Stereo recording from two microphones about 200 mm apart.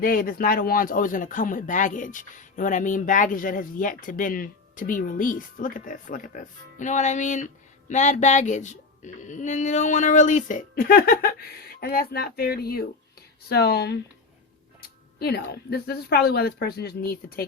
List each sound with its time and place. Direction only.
0.0 s speech: 45° left (ahead or behind)